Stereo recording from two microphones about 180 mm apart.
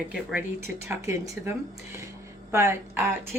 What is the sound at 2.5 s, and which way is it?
Speech, 15° right (ahead or behind).